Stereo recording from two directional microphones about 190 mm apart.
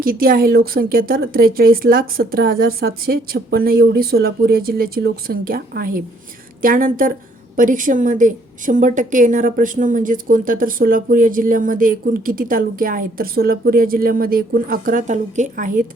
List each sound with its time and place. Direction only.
0.0 s a woman's voice: 50° right (ahead or behind)